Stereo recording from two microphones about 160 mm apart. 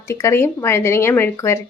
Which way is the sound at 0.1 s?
15° left (ahead or behind).